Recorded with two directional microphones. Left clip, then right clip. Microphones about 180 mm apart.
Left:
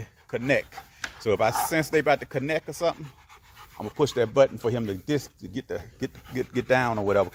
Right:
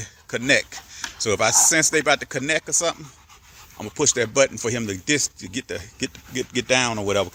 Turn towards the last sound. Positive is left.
turn(degrees=-10)  # may be behind; listen again after turning